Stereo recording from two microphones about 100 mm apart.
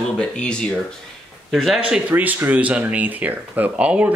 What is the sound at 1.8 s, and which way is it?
Speech, 15° right (ahead or behind).